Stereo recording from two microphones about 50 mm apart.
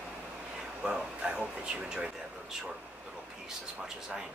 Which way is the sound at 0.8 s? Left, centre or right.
Right.